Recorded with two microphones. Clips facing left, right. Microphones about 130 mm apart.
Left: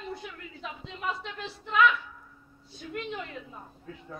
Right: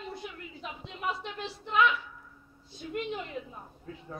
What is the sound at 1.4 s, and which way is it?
Speech, 30° right (ahead or behind).